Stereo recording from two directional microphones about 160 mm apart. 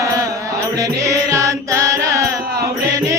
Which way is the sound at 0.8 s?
20° right (ahead or behind).